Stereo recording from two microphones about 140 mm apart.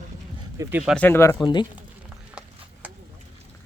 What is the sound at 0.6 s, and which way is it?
Speech, 10° right (ahead or behind).